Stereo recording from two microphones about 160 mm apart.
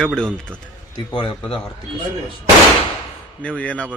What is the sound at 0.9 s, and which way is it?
Speech, 30° left (ahead or behind).